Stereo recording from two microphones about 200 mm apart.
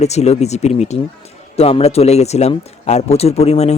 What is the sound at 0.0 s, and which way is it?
Speech, 35° left (ahead or behind).